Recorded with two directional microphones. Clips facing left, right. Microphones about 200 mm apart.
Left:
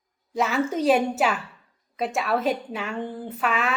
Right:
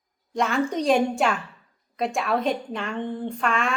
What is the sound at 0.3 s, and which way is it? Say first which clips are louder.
A woman's voice: even; 5° left (ahead or behind).